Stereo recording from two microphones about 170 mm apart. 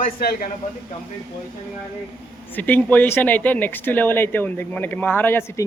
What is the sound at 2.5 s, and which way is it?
Speech, 10° left (ahead or behind).